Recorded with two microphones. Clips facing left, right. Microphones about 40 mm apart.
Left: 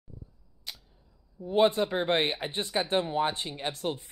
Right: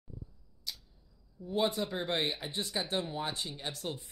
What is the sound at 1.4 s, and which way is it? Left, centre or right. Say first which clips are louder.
Speech: left 8 dB; left.